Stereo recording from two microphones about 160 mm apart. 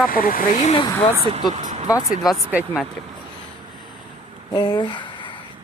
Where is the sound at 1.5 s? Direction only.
45° right (ahead or behind).